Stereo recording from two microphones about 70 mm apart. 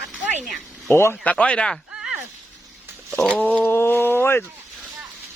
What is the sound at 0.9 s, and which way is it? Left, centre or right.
Speech, left.